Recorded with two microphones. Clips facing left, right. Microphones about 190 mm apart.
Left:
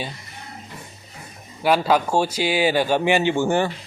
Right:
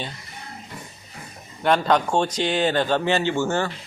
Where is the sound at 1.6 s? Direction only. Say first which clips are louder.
Left 1 dB; 5° left (ahead or behind).